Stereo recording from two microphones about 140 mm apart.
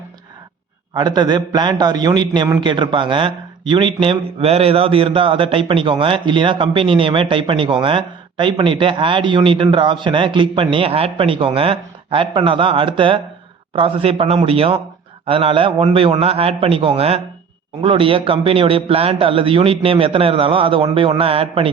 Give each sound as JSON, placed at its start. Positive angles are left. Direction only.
{"t": 0.9, "sound": "a man's voice", "side_deg": -30}